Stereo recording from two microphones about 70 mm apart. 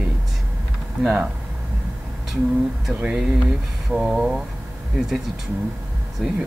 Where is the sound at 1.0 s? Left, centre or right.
Centre.